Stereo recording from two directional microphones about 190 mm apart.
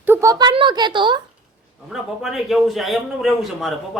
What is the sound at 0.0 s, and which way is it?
Speech, 15° right (ahead or behind).